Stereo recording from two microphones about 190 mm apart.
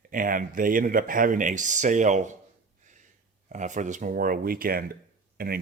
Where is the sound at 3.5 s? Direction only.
40° right (ahead or behind).